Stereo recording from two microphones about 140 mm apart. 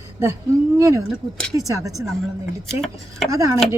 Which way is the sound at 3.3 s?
20° right (ahead or behind).